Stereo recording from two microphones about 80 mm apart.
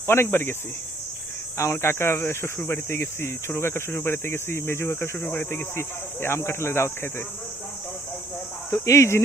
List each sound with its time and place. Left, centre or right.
0.1 s cricket: left
1.5 s speech: left
8.7 s speech: left